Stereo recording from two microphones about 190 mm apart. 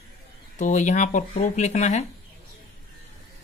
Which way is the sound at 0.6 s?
40° left (ahead or behind).